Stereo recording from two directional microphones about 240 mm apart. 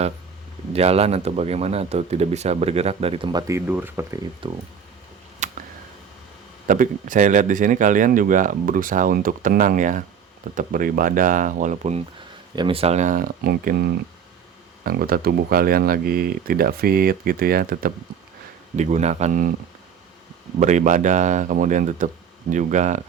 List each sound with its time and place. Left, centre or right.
0.7 s speech: right; by 4.2 s centre
4.4 s speech: right
5.4 s a sound: right
6.7 s speech: right
14.8 s speech: right
20.6 s speech: right